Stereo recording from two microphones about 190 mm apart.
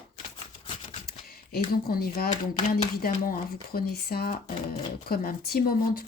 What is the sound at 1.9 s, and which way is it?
Speech, 55° left (ahead or behind).